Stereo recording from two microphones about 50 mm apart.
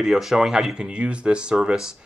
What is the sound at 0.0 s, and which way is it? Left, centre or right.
Speech, centre.